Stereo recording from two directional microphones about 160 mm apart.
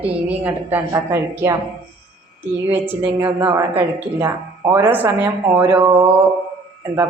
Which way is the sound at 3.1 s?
15° right (ahead or behind).